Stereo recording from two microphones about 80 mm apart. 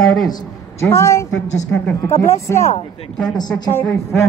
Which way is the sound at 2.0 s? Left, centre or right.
Left.